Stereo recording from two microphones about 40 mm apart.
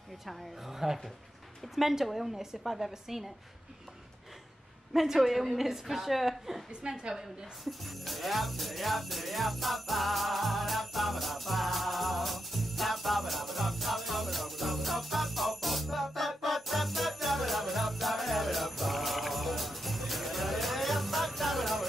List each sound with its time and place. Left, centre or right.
0.7 s a woman's voice: centre
4.9 s a woman's voice: centre
6.7 s a woman's voice: right
7.6 s jingle bell: centre